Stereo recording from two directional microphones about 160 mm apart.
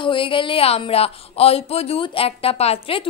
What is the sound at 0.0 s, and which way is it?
Speech, 30° left (ahead or behind).